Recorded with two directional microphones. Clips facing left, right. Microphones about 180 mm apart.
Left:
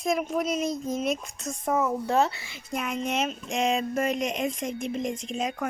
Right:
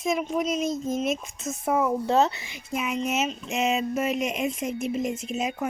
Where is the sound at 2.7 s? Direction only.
5° right (ahead or behind).